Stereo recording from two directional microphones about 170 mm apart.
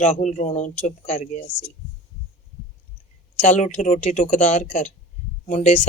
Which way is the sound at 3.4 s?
45° left (ahead or behind).